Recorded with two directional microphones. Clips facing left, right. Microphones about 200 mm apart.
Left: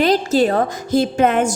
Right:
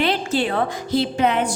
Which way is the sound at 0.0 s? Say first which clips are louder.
Left 6 dB; 40° left (ahead or behind).